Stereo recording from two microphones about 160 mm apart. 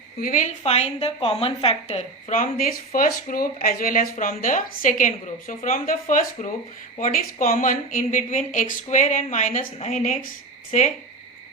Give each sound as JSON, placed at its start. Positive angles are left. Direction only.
{"t": 0.2, "sound": "a woman's voice", "side_deg": 55}
{"t": 2.3, "sound": "speech", "side_deg": 60}